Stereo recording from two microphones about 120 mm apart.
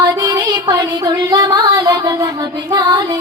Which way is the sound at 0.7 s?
35° right (ahead or behind).